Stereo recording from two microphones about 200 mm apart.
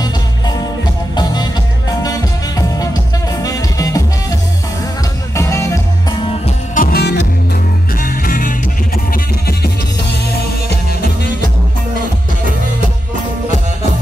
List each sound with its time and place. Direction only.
1.1 s music: 20° left (ahead or behind)
3.4 s music: 15° left (ahead or behind)
6.4 s music: 40° left (ahead or behind)